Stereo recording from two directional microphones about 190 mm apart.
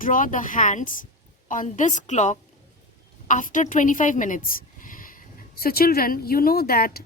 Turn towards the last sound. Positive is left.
turn(degrees=50)  # may be behind; listen again after turning